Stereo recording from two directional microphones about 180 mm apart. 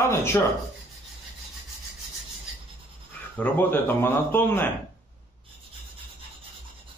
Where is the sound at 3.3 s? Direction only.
10° left (ahead or behind).